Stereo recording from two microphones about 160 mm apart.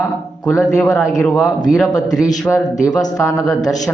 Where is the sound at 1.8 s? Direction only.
25° left (ahead or behind).